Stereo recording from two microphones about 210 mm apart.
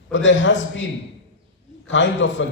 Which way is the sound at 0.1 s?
65° left (ahead or behind).